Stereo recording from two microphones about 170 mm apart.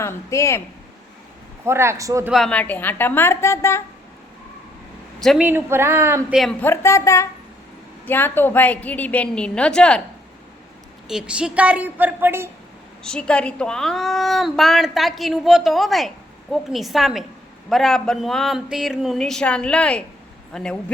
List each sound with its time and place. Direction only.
0.0 s a woman's voice: 15° left (ahead or behind)
1.6 s a woman's voice: 15° right (ahead or behind)
2.3 s a woman's voice: 5° left (ahead or behind)
5.2 s a woman's voice: centre (ahead or behind)
5.5 s a woman's voice: 15° right (ahead or behind)
6.3 s a woman's voice: 5° left (ahead or behind)
11.1 s a woman's voice: 5° right (ahead or behind)
13.0 s a woman's voice: 5° left (ahead or behind)